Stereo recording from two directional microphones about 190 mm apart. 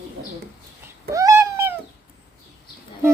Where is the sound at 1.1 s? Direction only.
15° right (ahead or behind).